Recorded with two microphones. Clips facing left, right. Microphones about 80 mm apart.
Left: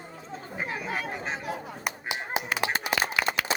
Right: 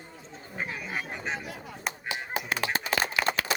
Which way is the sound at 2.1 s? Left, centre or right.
Centre.